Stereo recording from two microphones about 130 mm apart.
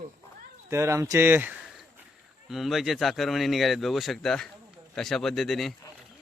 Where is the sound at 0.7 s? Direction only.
20° right (ahead or behind).